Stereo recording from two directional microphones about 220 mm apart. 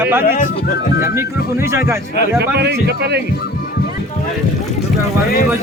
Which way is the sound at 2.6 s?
50° right (ahead or behind).